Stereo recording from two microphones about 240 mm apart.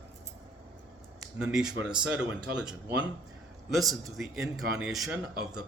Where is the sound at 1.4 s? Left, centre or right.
Centre.